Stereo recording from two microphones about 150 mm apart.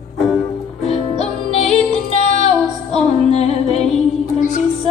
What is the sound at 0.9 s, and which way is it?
Music, 45° left (ahead or behind).